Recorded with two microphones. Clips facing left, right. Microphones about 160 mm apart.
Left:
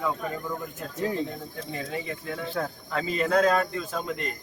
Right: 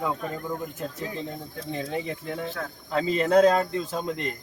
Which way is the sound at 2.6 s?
30° left (ahead or behind).